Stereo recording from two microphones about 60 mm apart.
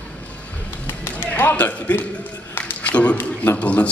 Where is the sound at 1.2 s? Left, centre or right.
Left.